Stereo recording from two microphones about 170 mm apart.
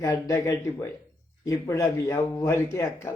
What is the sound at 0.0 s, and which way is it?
A man's voice, 15° left (ahead or behind).